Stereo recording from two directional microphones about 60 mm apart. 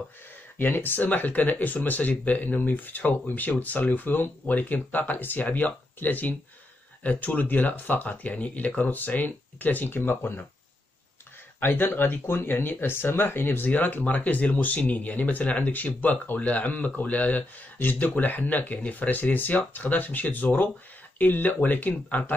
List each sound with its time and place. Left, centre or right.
0.6 s speech: left
11.6 s speech: left
13.7 s speech: left